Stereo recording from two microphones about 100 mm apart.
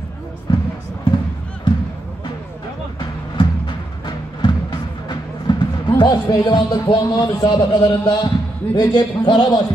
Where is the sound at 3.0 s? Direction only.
55° left (ahead or behind).